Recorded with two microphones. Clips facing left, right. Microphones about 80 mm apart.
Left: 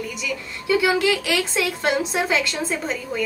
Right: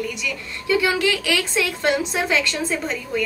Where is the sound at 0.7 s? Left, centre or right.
Centre.